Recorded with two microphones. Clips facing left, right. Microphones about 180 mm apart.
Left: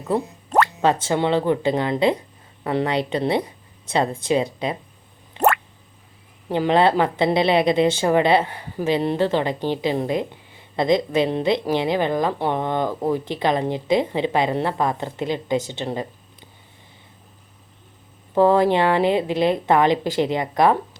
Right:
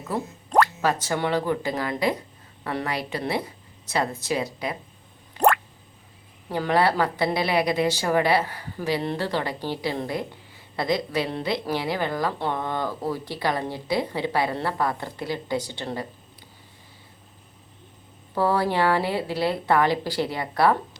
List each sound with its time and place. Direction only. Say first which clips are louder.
0.5 s music: left 1 dB; 5° left (ahead or behind)
1.0 s a woman's voice: left 5 dB; 25° left (ahead or behind)
5.4 s drip: left 1 dB; 25° left (ahead or behind)
6.5 s a woman's voice: left 5 dB; 20° left (ahead or behind)
18.3 s a woman's voice: left 6 dB; 20° left (ahead or behind)